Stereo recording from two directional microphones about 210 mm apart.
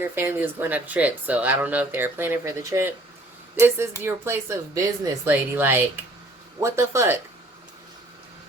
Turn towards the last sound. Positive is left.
turn(degrees=-10)  # may be behind; listen again after turning